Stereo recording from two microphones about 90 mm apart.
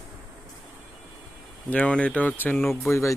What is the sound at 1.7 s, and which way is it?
Speech, 15° left (ahead or behind).